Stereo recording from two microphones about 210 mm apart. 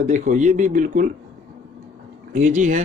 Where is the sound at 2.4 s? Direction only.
35° right (ahead or behind).